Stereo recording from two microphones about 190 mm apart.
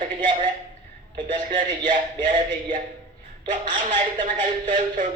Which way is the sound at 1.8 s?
45° right (ahead or behind).